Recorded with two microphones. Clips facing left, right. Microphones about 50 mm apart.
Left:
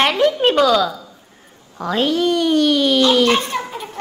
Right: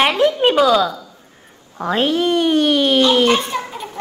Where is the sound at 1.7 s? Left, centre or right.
Right.